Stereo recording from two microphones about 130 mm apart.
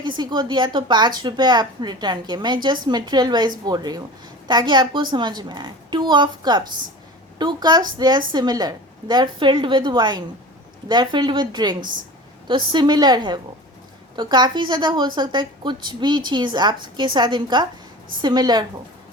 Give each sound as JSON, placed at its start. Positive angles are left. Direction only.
{"t": 0.0, "sound": "a woman's voice", "side_deg": -35}
{"t": 11.8, "sound": "speech", "side_deg": -90}
{"t": 12.5, "sound": "a woman's voice", "side_deg": -35}